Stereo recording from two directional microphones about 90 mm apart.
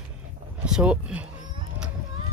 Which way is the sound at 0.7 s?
5° right (ahead or behind).